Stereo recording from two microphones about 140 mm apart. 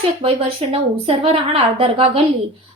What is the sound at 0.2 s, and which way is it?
A woman's voice, 40° right (ahead or behind).